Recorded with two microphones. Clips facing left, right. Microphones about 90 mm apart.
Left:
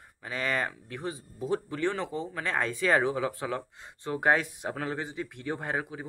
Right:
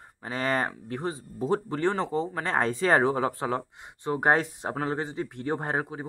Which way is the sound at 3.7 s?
20° right (ahead or behind).